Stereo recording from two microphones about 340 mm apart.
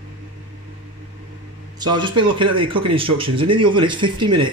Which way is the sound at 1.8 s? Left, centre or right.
Centre.